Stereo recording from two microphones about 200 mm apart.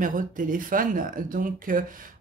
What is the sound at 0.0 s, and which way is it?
Speech, 40° right (ahead or behind).